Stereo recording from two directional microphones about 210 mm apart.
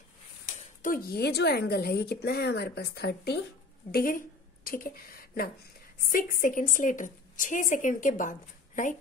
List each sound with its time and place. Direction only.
0.6 s a woman's voice: 40° left (ahead or behind)